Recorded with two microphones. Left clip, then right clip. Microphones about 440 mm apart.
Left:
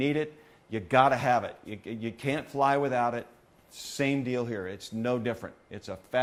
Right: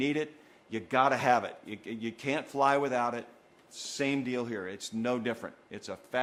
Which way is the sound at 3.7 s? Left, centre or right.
Left.